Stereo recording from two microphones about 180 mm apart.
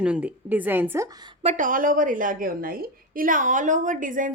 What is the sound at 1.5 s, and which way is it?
A woman's voice, 45° right (ahead or behind).